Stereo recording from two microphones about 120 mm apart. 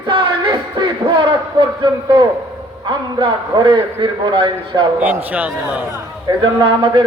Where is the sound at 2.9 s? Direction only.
40° right (ahead or behind).